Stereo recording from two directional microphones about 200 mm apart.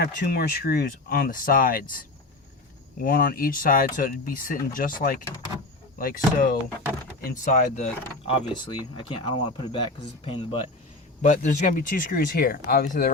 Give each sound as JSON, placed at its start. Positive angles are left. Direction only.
{"t": 0.0, "sound": "speech", "side_deg": 50}
{"t": 9.0, "sound": "speech", "side_deg": 25}
{"t": 11.3, "sound": "speech", "side_deg": 40}